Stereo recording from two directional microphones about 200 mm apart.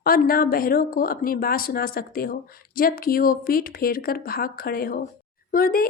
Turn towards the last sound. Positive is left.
turn(degrees=45)  # may be behind; listen again after turning